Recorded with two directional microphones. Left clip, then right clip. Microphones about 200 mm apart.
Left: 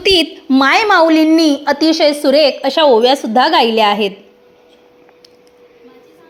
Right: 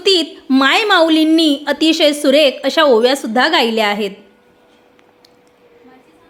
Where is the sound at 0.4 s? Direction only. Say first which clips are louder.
Right 2 dB; 5° right (ahead or behind).